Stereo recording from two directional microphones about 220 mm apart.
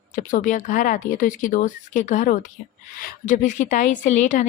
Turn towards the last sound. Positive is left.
turn(degrees=35)  # may be behind; listen again after turning